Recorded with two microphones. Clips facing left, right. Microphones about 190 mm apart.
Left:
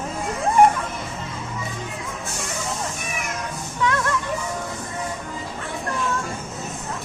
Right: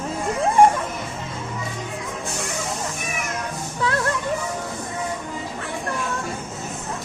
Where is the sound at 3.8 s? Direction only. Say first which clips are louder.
Even; 35° right (ahead or behind).